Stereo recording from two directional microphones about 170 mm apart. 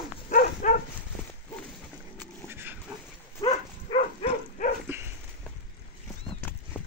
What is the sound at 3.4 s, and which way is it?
Dog, 35° left (ahead or behind).